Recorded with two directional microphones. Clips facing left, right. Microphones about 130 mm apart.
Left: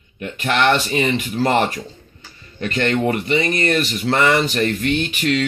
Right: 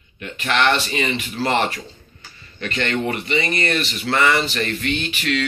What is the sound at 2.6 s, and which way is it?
Speech, 45° left (ahead or behind).